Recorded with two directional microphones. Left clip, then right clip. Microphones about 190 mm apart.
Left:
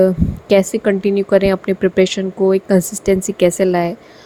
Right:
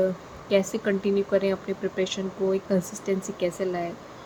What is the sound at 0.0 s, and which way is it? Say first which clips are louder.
Speech: left 12 dB; 45° left (ahead or behind).